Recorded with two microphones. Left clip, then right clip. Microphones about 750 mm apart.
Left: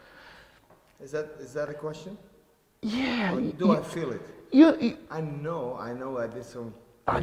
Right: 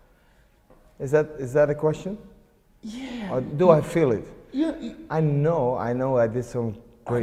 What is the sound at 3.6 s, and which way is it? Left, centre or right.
Speech, right.